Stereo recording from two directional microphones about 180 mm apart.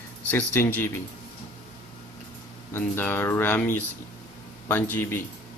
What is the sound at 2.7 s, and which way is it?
Speech, 10° left (ahead or behind).